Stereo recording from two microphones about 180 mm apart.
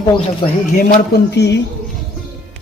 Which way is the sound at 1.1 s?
70° left (ahead or behind).